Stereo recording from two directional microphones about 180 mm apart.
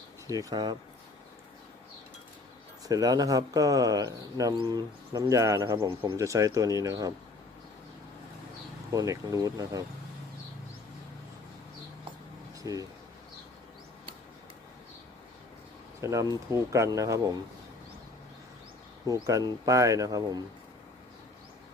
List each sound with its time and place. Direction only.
0.3 s speech: 20° right (ahead or behind)
2.8 s speech: 20° right (ahead or behind)
8.9 s speech: 20° right (ahead or behind)
12.7 s speech: 20° right (ahead or behind)
16.0 s speech: 15° right (ahead or behind)
19.0 s speech: 15° right (ahead or behind)